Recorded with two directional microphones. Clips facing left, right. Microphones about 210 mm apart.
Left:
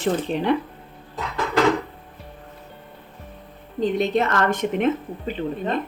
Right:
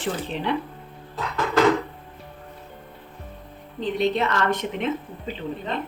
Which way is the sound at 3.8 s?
45° left (ahead or behind).